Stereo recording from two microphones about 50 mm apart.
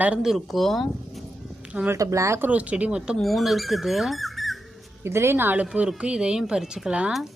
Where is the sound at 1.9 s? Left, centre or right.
Right.